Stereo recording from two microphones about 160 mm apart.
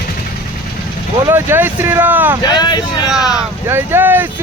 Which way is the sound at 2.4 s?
25° left (ahead or behind).